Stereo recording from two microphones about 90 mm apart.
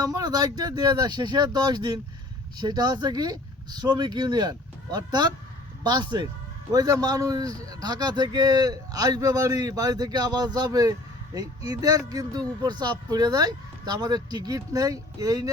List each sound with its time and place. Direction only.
0.0 s speech: 45° right (ahead or behind)
6.7 s speech: 40° right (ahead or behind)